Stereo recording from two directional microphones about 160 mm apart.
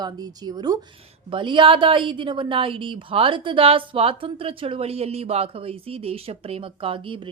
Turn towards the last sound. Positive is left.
turn(degrees=-35)  # may be behind; listen again after turning